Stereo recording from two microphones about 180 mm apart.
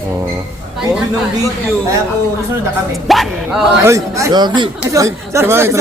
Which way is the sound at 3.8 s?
15° right (ahead or behind).